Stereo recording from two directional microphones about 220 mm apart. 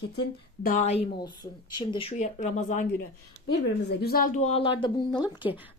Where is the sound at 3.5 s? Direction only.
45° left (ahead or behind); by 5.0 s 20° left (ahead or behind).